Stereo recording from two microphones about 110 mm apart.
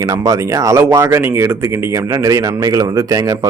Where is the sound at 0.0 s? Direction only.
30° right (ahead or behind).